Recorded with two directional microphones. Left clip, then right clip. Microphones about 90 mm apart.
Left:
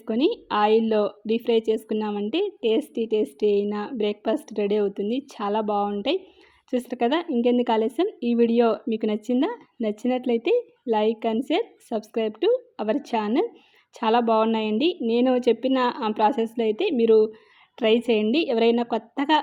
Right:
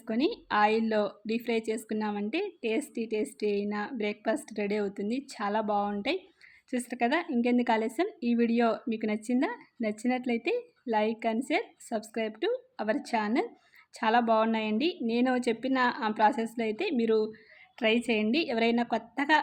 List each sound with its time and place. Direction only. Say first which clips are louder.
0.1 s a woman's voice: left 6 dB; 30° left (ahead or behind)